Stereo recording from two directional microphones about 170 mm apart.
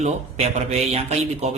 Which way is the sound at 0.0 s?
40° right (ahead or behind).